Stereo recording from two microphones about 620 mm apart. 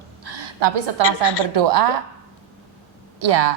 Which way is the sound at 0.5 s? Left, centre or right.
Right.